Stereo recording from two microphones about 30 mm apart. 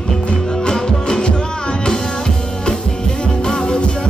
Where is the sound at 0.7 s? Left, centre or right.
Left.